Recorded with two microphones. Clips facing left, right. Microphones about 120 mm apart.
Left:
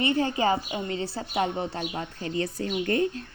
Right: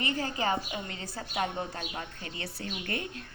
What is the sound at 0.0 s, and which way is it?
A woman's voice, 25° left (ahead or behind).